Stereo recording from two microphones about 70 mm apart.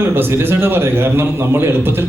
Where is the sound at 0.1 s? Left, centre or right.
Right.